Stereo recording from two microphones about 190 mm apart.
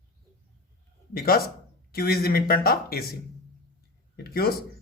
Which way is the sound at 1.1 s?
50° left (ahead or behind).